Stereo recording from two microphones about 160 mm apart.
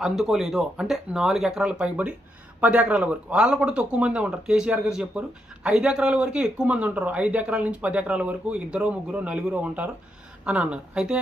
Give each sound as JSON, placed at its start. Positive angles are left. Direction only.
{"t": 0.0, "sound": "speech", "side_deg": 0}